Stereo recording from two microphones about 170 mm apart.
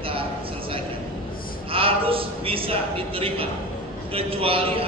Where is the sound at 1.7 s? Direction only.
35° right (ahead or behind).